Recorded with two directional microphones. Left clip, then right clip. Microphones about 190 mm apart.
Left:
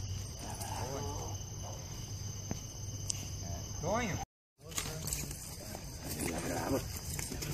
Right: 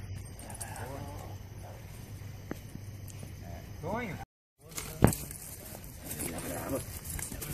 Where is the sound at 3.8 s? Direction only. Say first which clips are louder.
Left 2 dB; 35° left (ahead or behind).